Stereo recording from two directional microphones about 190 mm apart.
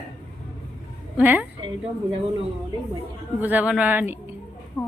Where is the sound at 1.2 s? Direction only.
10° right (ahead or behind).